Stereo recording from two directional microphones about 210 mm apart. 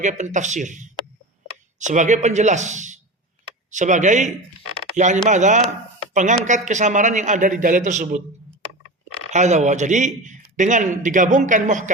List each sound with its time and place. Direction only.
0.0 s speech: 35° right (ahead or behind)
9.3 s speech: 35° right (ahead or behind)